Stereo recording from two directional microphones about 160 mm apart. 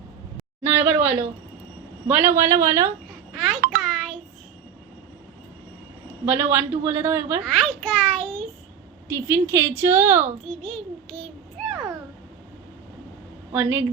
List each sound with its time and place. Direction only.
0.6 s a woman's voice: 15° right (ahead or behind)
3.3 s a child's voice: centre (ahead or behind)
3.8 s a sound: 5° left (ahead or behind)
6.2 s a woman's voice: 15° right (ahead or behind)
7.4 s a child's voice: 5° left (ahead or behind)
9.0 s a woman's voice: 15° right (ahead or behind)
10.5 s a child's voice: 5° left (ahead or behind)
13.5 s a woman's voice: 10° right (ahead or behind)